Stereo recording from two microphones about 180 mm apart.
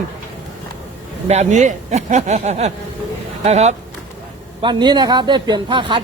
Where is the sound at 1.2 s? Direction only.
40° right (ahead or behind).